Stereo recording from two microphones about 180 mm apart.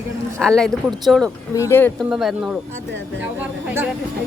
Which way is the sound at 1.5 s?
15° left (ahead or behind).